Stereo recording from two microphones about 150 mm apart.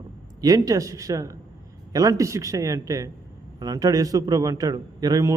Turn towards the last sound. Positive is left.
turn(degrees=-25)  # may be behind; listen again after turning